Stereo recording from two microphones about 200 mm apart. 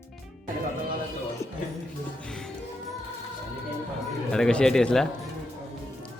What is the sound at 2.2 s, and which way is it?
Music, 5° left (ahead or behind).